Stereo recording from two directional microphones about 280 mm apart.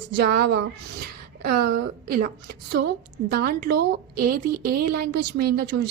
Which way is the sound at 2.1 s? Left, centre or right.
Right.